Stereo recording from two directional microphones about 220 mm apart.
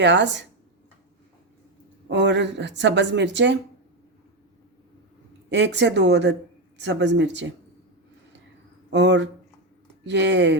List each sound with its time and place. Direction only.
0.0 s speech: 55° right (ahead or behind)
2.0 s speech: 50° right (ahead or behind)
5.5 s speech: 50° right (ahead or behind)
8.9 s speech: 55° right (ahead or behind)